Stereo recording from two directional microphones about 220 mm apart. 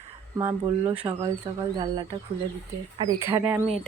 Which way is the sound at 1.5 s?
20° right (ahead or behind).